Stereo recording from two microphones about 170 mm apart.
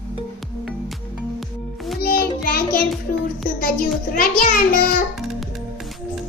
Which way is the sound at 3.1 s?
55° left (ahead or behind).